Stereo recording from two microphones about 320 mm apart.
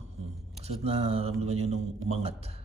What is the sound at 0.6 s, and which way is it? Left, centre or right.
Speech, centre.